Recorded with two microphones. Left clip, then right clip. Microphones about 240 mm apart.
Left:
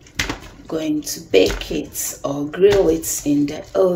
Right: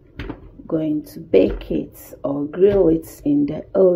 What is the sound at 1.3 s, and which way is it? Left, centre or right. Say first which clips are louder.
Speech: even; right.